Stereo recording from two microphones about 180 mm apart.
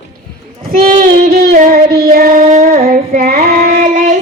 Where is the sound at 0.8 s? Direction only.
50° right (ahead or behind).